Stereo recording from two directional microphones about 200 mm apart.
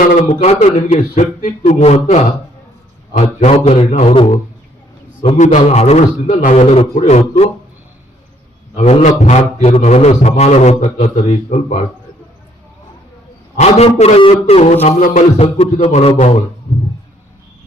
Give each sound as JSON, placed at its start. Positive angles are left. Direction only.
{"t": 0.3, "sound": "a man's voice", "side_deg": 30}
{"t": 5.4, "sound": "a man's voice", "side_deg": 35}
{"t": 8.7, "sound": "a man's voice", "side_deg": 35}
{"t": 13.6, "sound": "a man's voice", "side_deg": 30}